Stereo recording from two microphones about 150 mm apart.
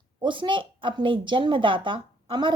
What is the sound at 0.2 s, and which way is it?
A woman's voice, 35° right (ahead or behind).